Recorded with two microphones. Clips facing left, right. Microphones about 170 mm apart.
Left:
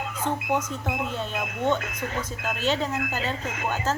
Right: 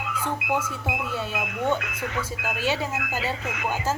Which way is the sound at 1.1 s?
10° right (ahead or behind).